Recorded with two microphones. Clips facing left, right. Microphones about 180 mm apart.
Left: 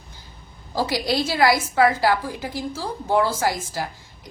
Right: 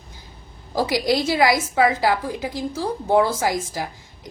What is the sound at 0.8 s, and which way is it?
A woman's voice, 20° right (ahead or behind).